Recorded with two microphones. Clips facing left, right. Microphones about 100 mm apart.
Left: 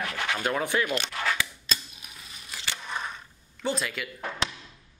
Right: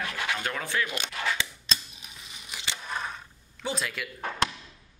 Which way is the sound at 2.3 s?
20° right (ahead or behind).